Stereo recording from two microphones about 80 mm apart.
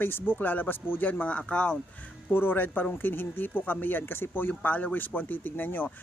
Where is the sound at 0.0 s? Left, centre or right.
Left.